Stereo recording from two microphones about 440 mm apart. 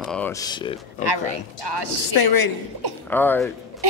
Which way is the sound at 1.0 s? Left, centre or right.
Right.